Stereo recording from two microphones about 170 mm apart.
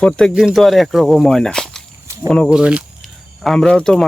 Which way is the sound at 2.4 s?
5° right (ahead or behind).